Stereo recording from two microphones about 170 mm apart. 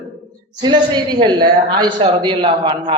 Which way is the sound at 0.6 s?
25° right (ahead or behind).